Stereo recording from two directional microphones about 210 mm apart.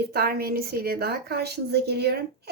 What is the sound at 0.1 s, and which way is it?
A woman's voice, 45° right (ahead or behind).